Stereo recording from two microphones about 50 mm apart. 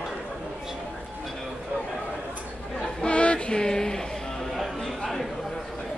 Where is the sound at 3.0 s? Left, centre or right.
Left.